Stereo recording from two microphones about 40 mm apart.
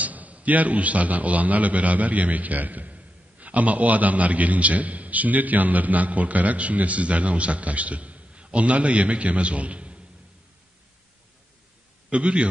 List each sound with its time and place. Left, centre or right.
0.0 s a man's voice: right
12.1 s a man's voice: right